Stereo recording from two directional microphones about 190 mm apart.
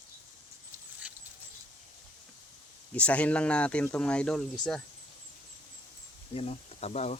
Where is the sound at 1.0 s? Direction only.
5° right (ahead or behind).